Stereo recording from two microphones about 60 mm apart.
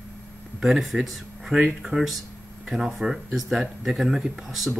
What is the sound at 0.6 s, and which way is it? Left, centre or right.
Speech, centre.